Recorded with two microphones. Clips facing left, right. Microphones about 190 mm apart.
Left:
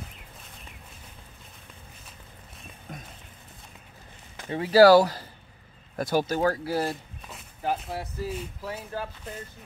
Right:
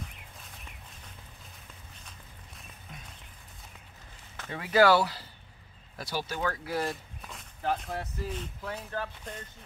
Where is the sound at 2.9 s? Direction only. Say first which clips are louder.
Left 8 dB; 50° left (ahead or behind).